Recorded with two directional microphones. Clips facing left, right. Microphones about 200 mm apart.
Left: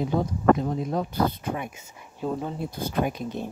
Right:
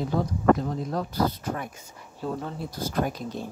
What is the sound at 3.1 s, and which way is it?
Speech, 50° left (ahead or behind).